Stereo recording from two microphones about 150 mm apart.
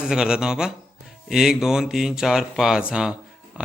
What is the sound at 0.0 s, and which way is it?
Speech, 5° right (ahead or behind).